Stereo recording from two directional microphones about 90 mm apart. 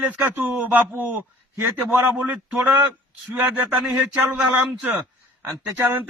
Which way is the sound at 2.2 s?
15° right (ahead or behind).